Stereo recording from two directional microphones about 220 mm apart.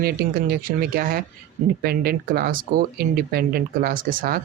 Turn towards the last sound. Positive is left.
turn(degrees=-40)  # may be behind; listen again after turning